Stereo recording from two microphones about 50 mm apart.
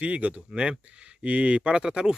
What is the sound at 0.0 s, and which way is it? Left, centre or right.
Speech, right.